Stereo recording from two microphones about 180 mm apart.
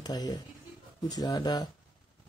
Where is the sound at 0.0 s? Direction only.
20° left (ahead or behind).